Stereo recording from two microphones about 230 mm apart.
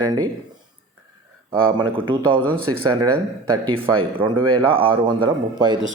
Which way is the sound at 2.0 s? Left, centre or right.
Right.